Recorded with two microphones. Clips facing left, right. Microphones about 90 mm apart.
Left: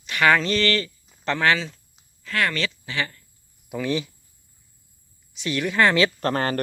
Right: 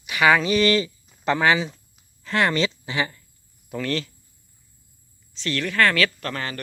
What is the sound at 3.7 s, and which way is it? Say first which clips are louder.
Speech: left 1 dB; 15° left (ahead or behind).